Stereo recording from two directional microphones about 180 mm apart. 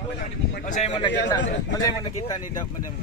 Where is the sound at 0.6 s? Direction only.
40° left (ahead or behind).